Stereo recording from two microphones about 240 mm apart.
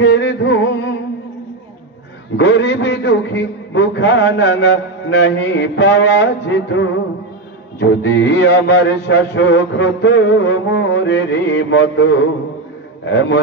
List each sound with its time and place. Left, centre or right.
0.0 s music: left
2.3 s a man's voice: left